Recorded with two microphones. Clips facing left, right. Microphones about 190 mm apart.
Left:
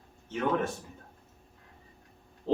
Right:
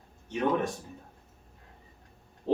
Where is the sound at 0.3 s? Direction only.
15° right (ahead or behind).